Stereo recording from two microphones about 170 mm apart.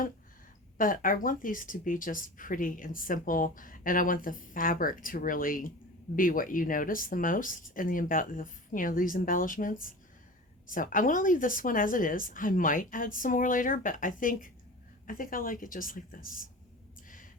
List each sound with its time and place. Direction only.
0.8 s a woman's voice: 55° left (ahead or behind)